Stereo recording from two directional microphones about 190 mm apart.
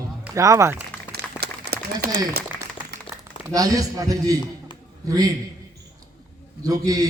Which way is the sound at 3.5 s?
20° right (ahead or behind).